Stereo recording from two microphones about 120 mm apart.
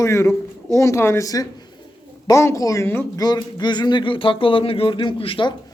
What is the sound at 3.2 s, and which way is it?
Speech, 35° left (ahead or behind).